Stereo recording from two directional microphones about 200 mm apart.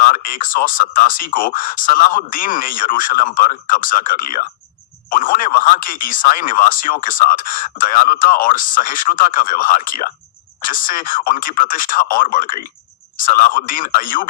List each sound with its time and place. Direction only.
0.0 s speech: 45° left (ahead or behind)